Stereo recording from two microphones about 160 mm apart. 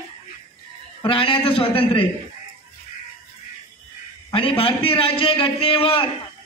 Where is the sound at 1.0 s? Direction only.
35° left (ahead or behind).